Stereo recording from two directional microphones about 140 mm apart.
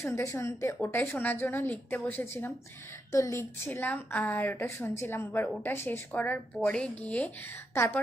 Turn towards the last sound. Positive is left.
turn(degrees=15)  # may be behind; listen again after turning